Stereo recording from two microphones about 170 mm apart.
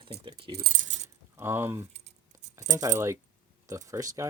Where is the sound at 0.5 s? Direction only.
55° right (ahead or behind).